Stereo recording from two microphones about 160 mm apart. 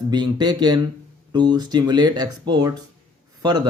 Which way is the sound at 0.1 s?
25° right (ahead or behind).